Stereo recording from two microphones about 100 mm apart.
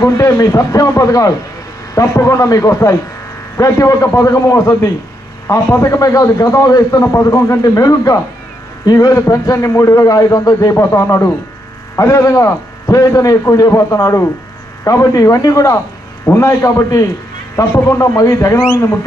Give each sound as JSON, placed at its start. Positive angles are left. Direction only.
{"t": 0.0, "sound": "a man's voice", "side_deg": 30}